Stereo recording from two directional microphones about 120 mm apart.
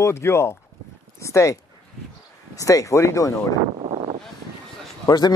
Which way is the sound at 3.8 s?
55° right (ahead or behind).